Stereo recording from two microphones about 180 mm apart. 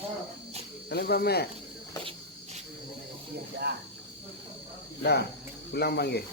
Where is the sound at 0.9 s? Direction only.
60° left (ahead or behind).